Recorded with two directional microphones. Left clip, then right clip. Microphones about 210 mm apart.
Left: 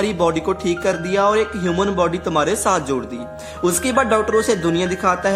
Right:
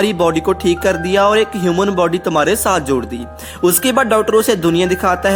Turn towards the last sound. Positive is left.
turn(degrees=-25)  # may be behind; listen again after turning